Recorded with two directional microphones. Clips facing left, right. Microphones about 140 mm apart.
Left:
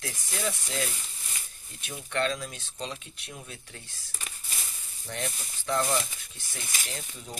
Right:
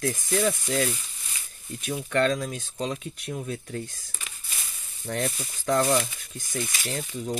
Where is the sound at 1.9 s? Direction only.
50° right (ahead or behind).